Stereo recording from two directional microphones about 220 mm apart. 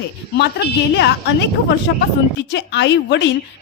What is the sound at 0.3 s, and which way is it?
A woman's voice, 50° left (ahead or behind).